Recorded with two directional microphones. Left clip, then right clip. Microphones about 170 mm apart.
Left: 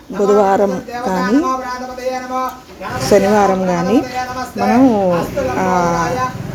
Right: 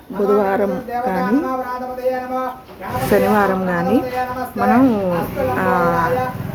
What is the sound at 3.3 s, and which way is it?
A woman's voice, 5° left (ahead or behind).